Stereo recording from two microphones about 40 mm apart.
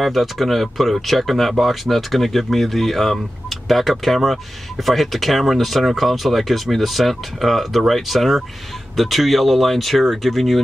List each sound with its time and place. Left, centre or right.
0.0 s speech: centre